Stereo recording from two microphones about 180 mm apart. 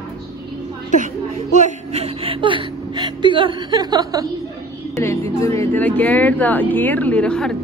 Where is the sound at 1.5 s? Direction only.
40° right (ahead or behind); by 4.3 s 20° right (ahead or behind).